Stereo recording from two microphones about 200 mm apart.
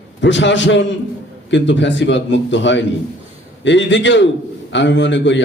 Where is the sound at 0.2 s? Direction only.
65° left (ahead or behind).